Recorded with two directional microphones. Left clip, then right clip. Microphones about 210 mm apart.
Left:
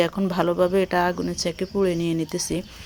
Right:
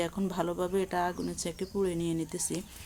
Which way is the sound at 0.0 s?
20° left (ahead or behind).